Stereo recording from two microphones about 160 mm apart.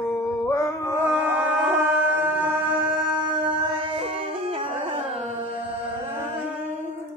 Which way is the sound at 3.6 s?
30° right (ahead or behind).